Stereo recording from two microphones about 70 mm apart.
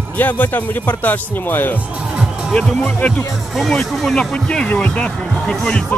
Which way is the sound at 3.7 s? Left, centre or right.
Centre.